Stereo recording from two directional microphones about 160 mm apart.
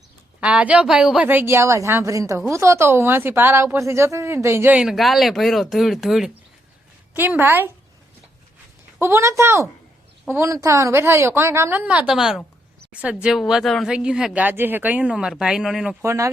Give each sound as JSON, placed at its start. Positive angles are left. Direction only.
{"t": 0.3, "sound": "a woman's voice", "side_deg": -5}
{"t": 9.0, "sound": "a woman's voice", "side_deg": -15}
{"t": 16.0, "sound": "speech", "side_deg": -20}